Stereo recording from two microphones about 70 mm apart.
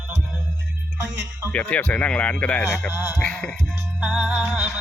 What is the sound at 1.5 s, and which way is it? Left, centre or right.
Speech, centre.